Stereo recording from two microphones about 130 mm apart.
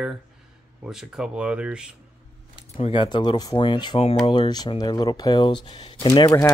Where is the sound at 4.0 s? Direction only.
50° left (ahead or behind).